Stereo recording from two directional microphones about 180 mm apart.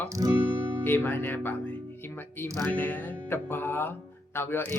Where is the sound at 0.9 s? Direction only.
10° left (ahead or behind).